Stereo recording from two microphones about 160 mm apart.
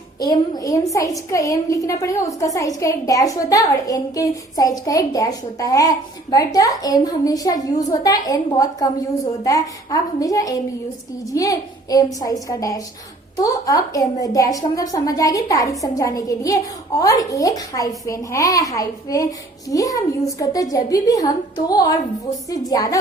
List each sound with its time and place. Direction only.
0.2 s a woman's voice: 25° left (ahead or behind)